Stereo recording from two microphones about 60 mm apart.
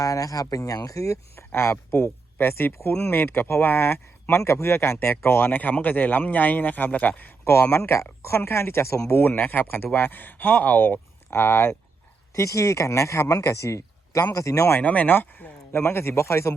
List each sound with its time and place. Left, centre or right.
0.0 s speech: left
7.4 s speech: left
12.3 s speech: left
14.8 s speech: left
15.8 s speech: left